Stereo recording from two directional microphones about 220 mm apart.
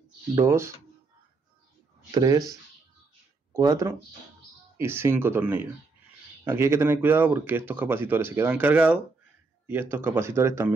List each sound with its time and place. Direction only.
0.4 s speech: 10° right (ahead or behind)
2.1 s speech: 15° right (ahead or behind)
3.5 s speech: 15° right (ahead or behind)